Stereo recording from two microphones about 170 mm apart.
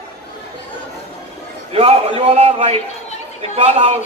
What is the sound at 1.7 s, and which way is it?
A man's voice, 35° right (ahead or behind).